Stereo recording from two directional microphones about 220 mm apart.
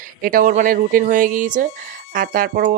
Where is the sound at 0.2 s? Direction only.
40° right (ahead or behind).